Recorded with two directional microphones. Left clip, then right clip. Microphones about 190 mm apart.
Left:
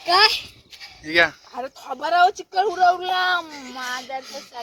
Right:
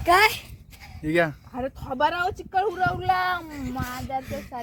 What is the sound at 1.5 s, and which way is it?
Speech, 50° left (ahead or behind).